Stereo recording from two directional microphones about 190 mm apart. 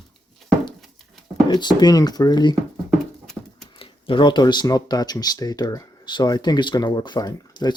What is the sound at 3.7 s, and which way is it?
Speech, 30° left (ahead or behind).